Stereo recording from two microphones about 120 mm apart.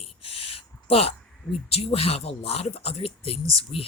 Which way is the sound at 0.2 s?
50° left (ahead or behind).